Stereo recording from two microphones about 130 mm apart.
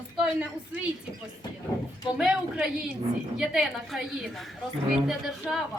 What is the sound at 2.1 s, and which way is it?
A woman's voice, 5° right (ahead or behind).